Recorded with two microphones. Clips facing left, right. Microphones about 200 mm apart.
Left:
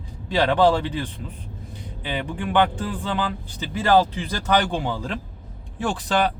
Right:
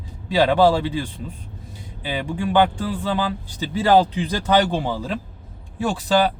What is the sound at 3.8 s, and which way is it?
Speech, 15° right (ahead or behind).